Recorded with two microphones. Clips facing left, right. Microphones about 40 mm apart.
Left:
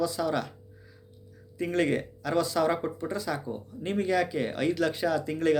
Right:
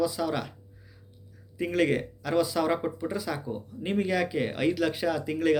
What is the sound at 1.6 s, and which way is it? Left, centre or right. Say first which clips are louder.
Speech: right 1 dB; centre.